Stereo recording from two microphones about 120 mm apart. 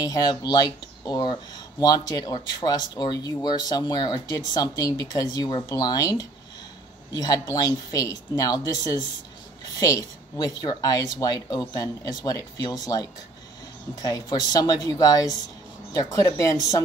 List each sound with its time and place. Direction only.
0.0 s speech: 35° left (ahead or behind)